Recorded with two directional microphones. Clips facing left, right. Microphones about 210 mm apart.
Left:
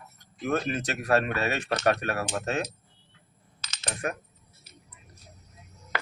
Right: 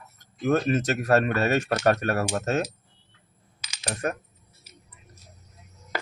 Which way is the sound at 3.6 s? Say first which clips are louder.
Right 4 dB; 10° right (ahead or behind).